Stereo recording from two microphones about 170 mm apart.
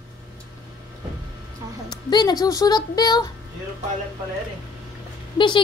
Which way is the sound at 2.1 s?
25° left (ahead or behind).